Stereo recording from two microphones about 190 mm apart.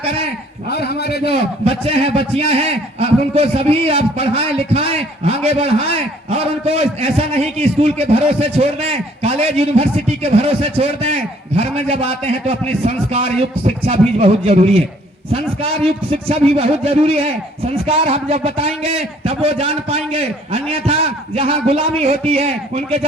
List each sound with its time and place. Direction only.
0.7 s a man's voice: 55° left (ahead or behind)
1.3 s a man's voice: 30° right (ahead or behind)